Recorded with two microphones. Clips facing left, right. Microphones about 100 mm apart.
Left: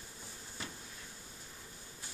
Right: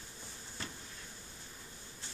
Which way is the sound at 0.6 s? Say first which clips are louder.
Even; 5° left (ahead or behind).